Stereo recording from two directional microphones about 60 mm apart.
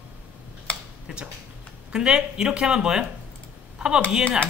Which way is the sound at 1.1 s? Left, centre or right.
Centre.